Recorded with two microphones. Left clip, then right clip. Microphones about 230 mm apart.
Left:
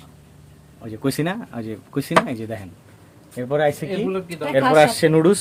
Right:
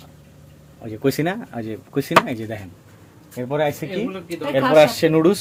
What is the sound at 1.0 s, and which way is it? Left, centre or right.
Speech, centre.